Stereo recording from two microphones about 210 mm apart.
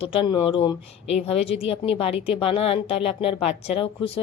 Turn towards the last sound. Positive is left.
turn(degrees=25)  # may be behind; listen again after turning